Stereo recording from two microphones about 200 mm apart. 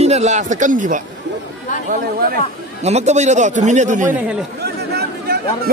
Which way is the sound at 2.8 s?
35° right (ahead or behind).